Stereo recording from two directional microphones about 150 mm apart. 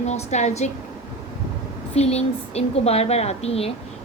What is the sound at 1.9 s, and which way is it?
A woman's voice, 45° left (ahead or behind).